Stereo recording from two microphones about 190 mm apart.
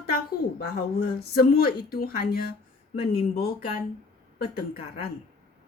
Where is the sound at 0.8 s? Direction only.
55° left (ahead or behind).